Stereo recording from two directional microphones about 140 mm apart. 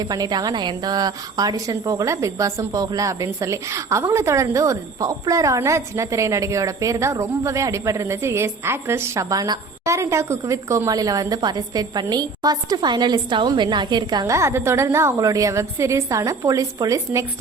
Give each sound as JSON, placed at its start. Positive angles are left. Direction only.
{"t": 0.0, "sound": "speech", "side_deg": -25}